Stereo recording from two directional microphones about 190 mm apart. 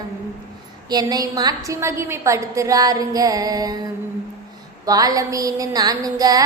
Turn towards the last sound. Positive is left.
turn(degrees=-20)  # may be behind; listen again after turning